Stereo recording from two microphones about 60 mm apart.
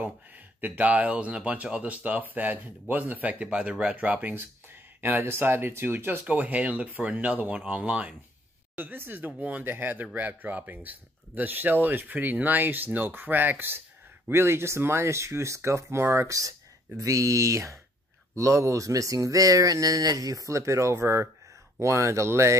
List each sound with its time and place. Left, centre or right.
0.6 s speech: right
5.0 s speech: right
6.2 s speech: right
8.7 s speech: right